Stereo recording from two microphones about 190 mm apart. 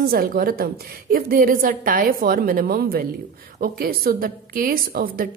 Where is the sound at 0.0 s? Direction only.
50° right (ahead or behind).